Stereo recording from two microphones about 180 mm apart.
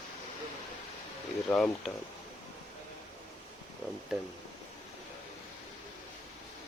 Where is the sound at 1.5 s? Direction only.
5° left (ahead or behind).